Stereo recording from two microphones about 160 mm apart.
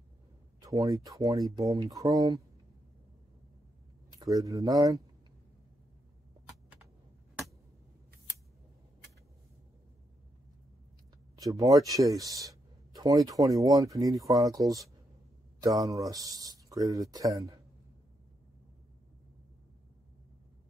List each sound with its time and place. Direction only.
0.6 s speech: 20° right (ahead or behind)
4.1 s speech: 20° right (ahead or behind)
11.3 s speech: 20° right (ahead or behind)